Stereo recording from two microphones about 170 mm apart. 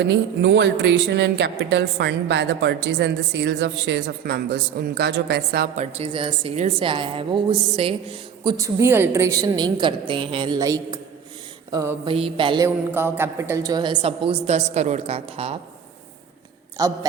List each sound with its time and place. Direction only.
0.0 s speech: 90° right; by 5.6 s 70° right (ahead or behind)
5.7 s a woman's voice: 45° right (ahead or behind)
6.1 s a woman's voice: 35° right (ahead or behind)
8.5 s a woman's voice: 15° right (ahead or behind)
11.7 s mantra: 20° right (ahead or behind)
12.0 s a woman's voice: 30° right (ahead or behind)
12.6 s a woman's voice: 15° right (ahead or behind); by 15.5 s 35° right (ahead or behind)
16.7 s a woman's voice: 20° right (ahead or behind)